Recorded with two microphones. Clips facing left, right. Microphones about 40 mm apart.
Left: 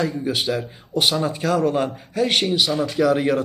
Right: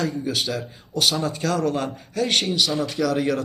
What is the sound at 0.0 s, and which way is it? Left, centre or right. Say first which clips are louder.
A man's voice: left 2 dB; centre.